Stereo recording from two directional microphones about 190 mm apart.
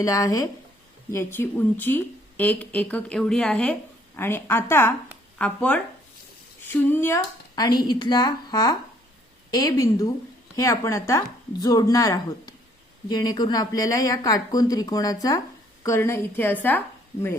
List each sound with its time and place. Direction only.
0.0 s a woman's voice: 15° left (ahead or behind)